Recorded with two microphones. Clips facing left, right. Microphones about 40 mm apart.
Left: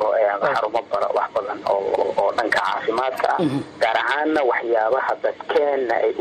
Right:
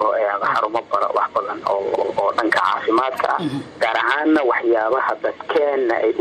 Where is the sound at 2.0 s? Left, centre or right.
Centre.